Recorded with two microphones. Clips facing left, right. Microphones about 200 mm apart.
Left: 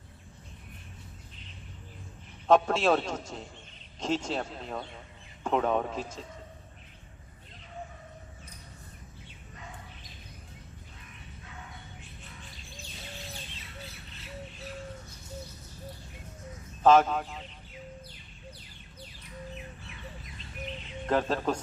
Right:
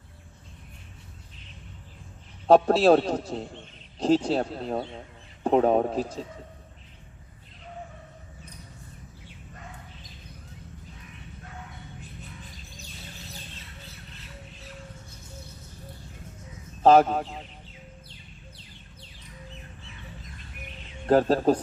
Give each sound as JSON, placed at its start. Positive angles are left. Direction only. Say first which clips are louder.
{"t": 2.5, "sound": "a man's voice", "louder": "right 6 dB", "side_deg": -35}
{"t": 16.8, "sound": "a man's voice", "louder": "right 4 dB", "side_deg": -35}
{"t": 21.1, "sound": "a man's voice", "louder": "right 8 dB", "side_deg": -40}